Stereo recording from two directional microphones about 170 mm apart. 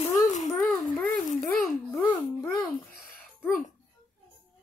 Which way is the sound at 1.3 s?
5° left (ahead or behind).